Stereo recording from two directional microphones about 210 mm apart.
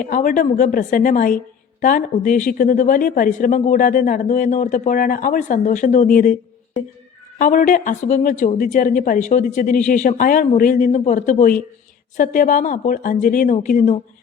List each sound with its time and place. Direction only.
0.0 s a woman's voice: 40° left (ahead or behind)
7.3 s a woman's voice: 40° left (ahead or behind)